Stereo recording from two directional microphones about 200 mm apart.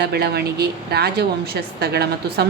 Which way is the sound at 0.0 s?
55° right (ahead or behind).